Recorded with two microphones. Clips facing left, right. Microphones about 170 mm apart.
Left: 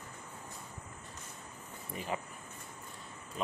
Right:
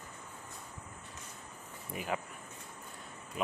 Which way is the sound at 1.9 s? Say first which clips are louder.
Right 1 dB; 5° right (ahead or behind).